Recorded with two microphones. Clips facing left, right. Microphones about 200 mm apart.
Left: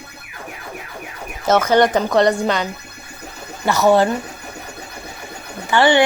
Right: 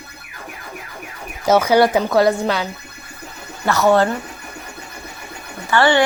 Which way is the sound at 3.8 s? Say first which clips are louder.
Left 1 dB; 15° left (ahead or behind).